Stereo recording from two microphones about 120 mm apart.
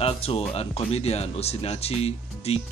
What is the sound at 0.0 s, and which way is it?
Speech, 55° left (ahead or behind).